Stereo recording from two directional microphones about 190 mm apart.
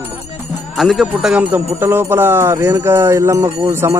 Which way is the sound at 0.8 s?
Centre (ahead or behind).